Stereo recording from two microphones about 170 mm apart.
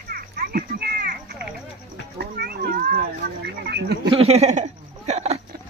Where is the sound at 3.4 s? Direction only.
75° right (ahead or behind).